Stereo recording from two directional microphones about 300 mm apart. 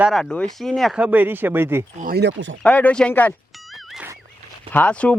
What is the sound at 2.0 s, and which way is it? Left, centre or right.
Speech, right.